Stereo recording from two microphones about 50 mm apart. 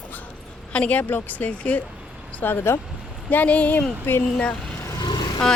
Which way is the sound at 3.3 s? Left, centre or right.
Left.